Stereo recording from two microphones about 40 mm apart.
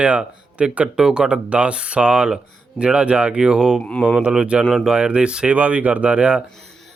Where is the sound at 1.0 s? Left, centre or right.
Centre.